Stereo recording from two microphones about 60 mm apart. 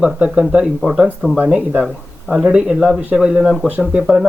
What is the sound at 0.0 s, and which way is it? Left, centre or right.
Speech, centre.